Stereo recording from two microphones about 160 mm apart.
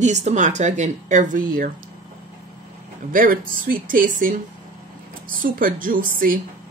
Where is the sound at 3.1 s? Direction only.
60° right (ahead or behind).